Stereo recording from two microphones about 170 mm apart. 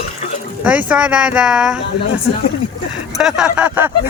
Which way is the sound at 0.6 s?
10° right (ahead or behind).